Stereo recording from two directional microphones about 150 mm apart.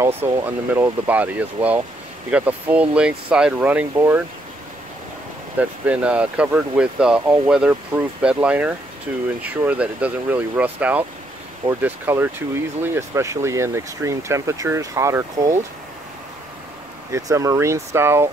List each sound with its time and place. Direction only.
0.2 s speech: 15° right (ahead or behind)
5.6 s speech: 10° right (ahead or behind)
17.1 s speech: 20° right (ahead or behind)